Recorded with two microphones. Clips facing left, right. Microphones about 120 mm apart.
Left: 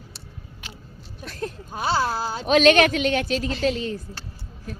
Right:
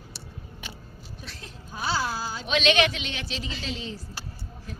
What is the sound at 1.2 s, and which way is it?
Speech, 50° left (ahead or behind).